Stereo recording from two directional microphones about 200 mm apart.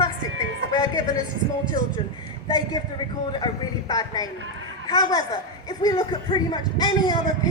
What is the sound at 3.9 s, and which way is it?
Speech, 20° left (ahead or behind).